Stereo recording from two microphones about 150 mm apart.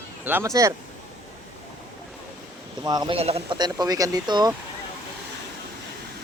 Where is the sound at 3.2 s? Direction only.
45° right (ahead or behind).